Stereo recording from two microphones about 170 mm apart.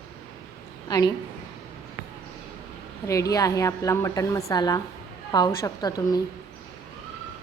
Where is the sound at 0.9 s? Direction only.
20° left (ahead or behind).